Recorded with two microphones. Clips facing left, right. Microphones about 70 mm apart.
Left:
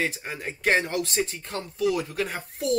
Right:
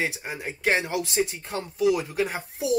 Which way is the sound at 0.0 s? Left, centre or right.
Centre.